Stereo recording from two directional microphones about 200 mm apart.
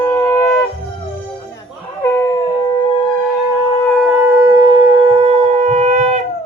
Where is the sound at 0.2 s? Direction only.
15° left (ahead or behind).